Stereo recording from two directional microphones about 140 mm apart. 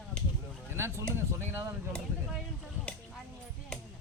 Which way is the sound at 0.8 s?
20° right (ahead or behind).